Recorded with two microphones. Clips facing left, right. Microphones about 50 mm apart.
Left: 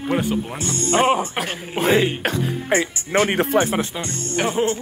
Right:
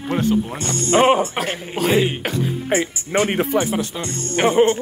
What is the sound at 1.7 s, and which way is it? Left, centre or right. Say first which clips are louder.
Speech: left 1 dB; left.